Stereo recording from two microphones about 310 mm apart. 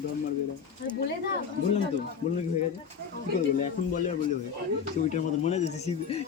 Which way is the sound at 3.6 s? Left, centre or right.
Left.